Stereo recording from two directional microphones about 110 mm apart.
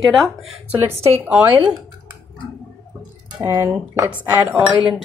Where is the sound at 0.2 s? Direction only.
Centre (ahead or behind).